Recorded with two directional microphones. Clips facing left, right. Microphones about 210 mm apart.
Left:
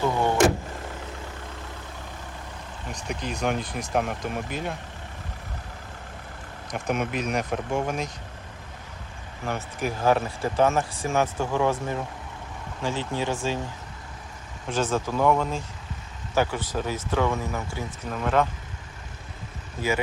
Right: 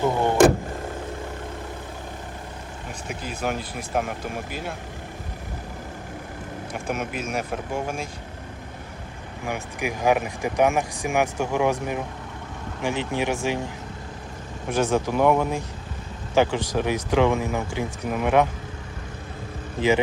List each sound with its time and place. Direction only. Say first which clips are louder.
0.0 s vehicle: right 2 dB; 15° right (ahead or behind)
3.1 s speech: left 1 dB; 5° right (ahead or behind)
6.8 s speech: left 3 dB; 5° right (ahead or behind)
9.5 s speech: even; 15° right (ahead or behind)
14.7 s speech: right 3 dB; 10° right (ahead or behind)